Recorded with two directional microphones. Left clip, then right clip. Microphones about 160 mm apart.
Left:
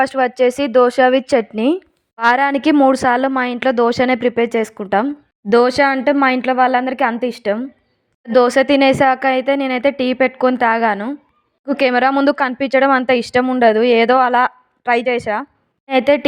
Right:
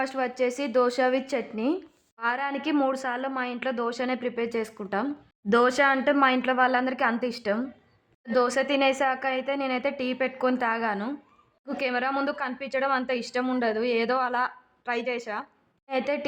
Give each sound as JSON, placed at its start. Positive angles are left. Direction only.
{"t": 0.0, "sound": "a woman's voice", "side_deg": 45}
{"t": 5.0, "sound": "a woman's voice", "side_deg": 30}
{"t": 8.3, "sound": "a woman's voice", "side_deg": 40}